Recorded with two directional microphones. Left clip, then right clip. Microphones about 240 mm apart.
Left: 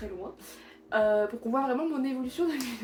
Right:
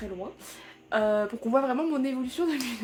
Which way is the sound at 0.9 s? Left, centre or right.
Right.